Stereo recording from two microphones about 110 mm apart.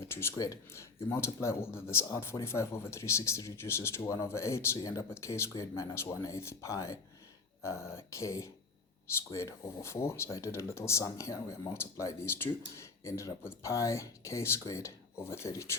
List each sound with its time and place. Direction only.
0.0 s speech: 20° left (ahead or behind)